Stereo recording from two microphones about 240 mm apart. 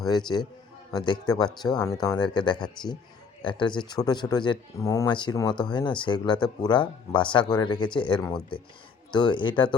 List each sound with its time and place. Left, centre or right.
0.9 s speech: centre